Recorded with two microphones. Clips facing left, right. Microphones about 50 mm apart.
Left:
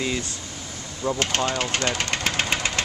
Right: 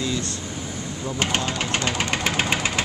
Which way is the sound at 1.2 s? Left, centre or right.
Centre.